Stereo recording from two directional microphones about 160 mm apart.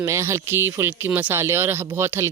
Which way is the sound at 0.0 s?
15° right (ahead or behind).